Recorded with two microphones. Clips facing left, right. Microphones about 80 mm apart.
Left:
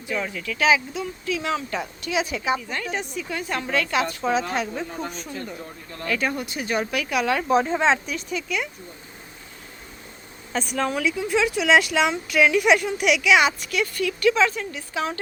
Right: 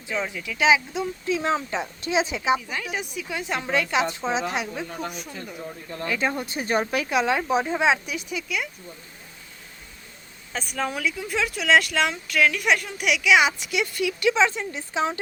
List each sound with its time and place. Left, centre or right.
0.1 s speech: centre
2.6 s speech: centre
6.0 s speech: right; by 8.7 s centre
10.5 s speech: centre
13.6 s speech: centre